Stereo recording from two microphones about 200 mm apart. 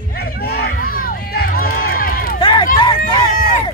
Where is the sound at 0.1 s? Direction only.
50° left (ahead or behind).